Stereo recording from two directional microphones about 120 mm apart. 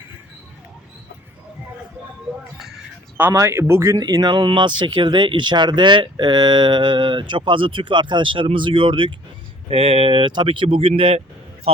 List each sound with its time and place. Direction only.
3.2 s speech: 20° right (ahead or behind); by 11.2 s 55° right (ahead or behind)